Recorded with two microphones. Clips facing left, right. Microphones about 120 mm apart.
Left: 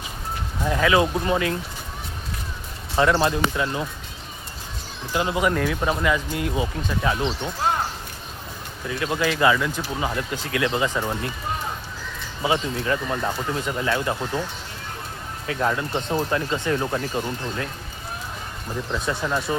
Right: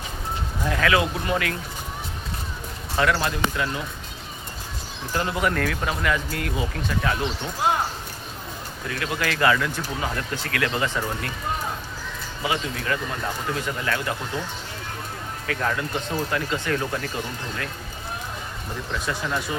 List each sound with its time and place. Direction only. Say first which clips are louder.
0.6 s speech: left 3 dB; 15° left (ahead or behind)
3.0 s speech: left 3 dB; 25° left (ahead or behind)
5.1 s speech: left 2 dB; 15° left (ahead or behind)
8.9 s speech: left 3 dB; 20° left (ahead or behind)
12.4 s speech: left 4 dB; 25° left (ahead or behind)
15.4 s speech: left 2 dB; 20° left (ahead or behind)
18.9 s speech: left 2 dB; 15° left (ahead or behind)